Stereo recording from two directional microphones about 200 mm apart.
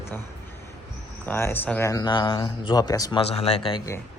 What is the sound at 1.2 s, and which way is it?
A man's voice, 10° left (ahead or behind).